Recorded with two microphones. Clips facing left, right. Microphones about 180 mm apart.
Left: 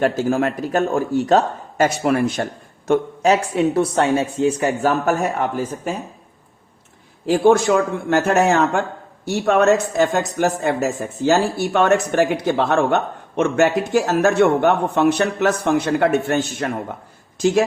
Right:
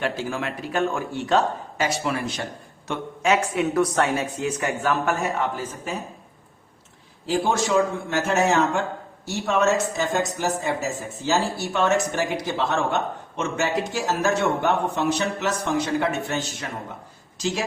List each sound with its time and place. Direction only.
0.0 s speech: 45° left (ahead or behind)
7.3 s speech: 55° left (ahead or behind)